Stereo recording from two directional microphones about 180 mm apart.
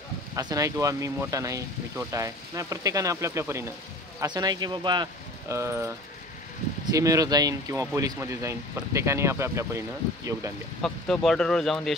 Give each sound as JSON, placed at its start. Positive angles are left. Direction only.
{"t": 0.4, "sound": "speech", "side_deg": -20}
{"t": 10.8, "sound": "speech", "side_deg": 5}